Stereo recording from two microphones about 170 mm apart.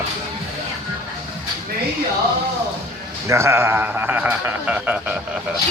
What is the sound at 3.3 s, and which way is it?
Speech, 15° right (ahead or behind).